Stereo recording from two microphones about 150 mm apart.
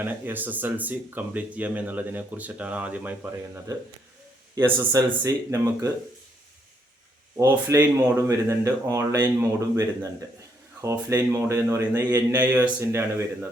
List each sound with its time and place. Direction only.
0.0 s speech: 15° right (ahead or behind)
4.5 s speech: 20° right (ahead or behind)
7.3 s speech: 15° right (ahead or behind)